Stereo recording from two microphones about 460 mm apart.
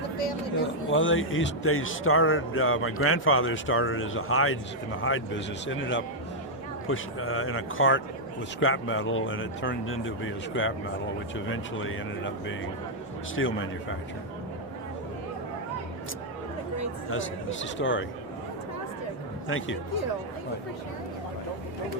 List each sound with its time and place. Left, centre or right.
0.9 s speech: left
17.1 s speech: left
19.5 s speech: left